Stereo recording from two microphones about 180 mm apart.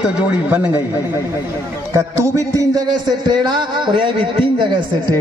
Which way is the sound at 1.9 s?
15° right (ahead or behind).